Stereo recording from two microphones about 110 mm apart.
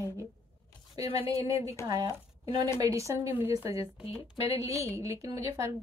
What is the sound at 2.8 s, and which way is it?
A woman's voice, 30° right (ahead or behind).